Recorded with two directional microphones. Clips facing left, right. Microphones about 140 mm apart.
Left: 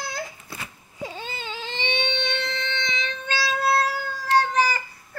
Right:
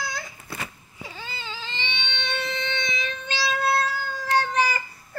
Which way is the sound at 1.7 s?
50° left (ahead or behind).